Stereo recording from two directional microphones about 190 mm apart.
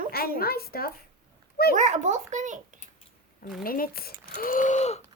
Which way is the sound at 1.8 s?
40° right (ahead or behind).